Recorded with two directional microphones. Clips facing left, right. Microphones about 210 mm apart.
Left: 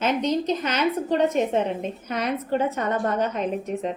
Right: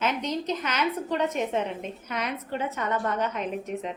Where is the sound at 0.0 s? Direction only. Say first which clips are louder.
Left 6 dB; 30° left (ahead or behind).